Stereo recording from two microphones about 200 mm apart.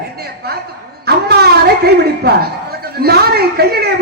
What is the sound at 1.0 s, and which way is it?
Speech, 50° right (ahead or behind).